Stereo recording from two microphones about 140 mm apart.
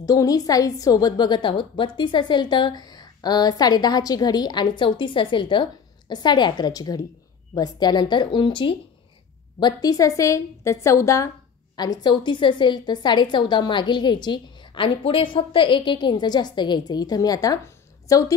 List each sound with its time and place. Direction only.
0.0 s a woman's voice: 25° left (ahead or behind)